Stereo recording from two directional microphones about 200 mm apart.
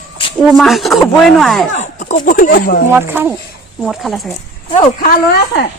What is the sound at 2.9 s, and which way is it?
Speech, 10° right (ahead or behind).